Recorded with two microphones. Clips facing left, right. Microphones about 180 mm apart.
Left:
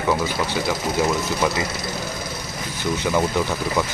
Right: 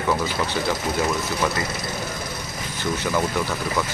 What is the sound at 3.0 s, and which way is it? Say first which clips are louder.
Speech: left 3 dB; 15° left (ahead or behind).